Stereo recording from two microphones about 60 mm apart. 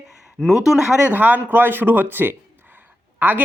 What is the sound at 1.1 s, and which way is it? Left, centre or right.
Speech, right.